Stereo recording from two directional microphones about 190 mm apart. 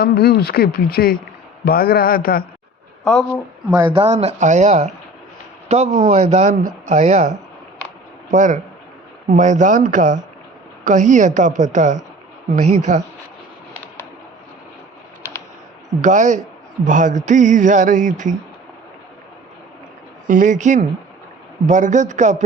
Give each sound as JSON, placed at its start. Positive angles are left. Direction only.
{"t": 0.0, "sound": "speech", "side_deg": 55}
{"t": 3.0, "sound": "speech", "side_deg": 5}
{"t": 3.8, "sound": "speech", "side_deg": -30}
{"t": 16.0, "sound": "speech", "side_deg": -40}
{"t": 20.2, "sound": "speech", "side_deg": -45}